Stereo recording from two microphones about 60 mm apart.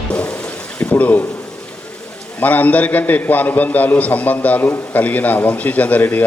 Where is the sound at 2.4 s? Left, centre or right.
Left.